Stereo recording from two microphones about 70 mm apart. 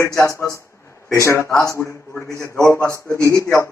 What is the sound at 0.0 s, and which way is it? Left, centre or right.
Speech, left.